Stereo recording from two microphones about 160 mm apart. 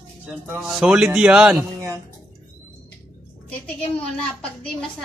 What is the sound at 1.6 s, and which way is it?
Music, 20° right (ahead or behind).